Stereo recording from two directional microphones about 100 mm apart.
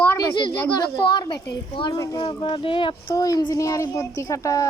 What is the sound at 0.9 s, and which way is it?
A child's voice, 45° left (ahead or behind).